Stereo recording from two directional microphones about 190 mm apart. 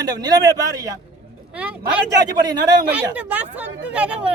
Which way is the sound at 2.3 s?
20° right (ahead or behind).